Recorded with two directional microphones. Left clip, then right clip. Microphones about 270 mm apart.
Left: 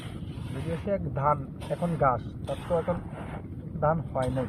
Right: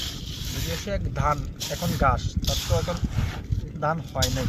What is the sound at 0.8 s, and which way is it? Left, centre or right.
Speech, right.